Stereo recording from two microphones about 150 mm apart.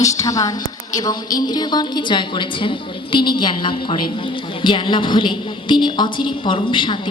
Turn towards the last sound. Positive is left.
turn(degrees=35)  # may be behind; listen again after turning